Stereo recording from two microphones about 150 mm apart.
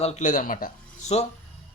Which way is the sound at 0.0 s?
50° left (ahead or behind).